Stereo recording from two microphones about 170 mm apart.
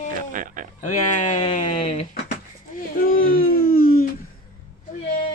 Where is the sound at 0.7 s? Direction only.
45° left (ahead or behind).